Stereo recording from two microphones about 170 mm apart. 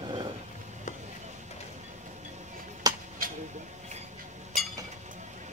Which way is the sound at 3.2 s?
55° right (ahead or behind).